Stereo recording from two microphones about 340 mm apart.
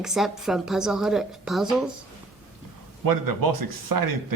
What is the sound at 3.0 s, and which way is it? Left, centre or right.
Speech, right.